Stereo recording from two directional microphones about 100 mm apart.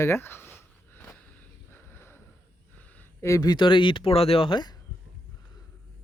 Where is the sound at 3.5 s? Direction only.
55° left (ahead or behind).